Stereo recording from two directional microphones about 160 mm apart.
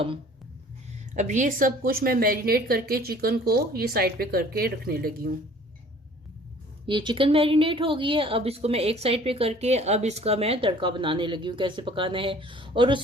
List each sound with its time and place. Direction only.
1.1 s a woman's voice: 50° right (ahead or behind); by 5.3 s 70° right (ahead or behind)
6.8 s a woman's voice: 30° right (ahead or behind)